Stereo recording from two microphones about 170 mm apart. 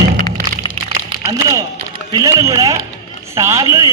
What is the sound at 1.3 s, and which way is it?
A man's voice, 20° right (ahead or behind).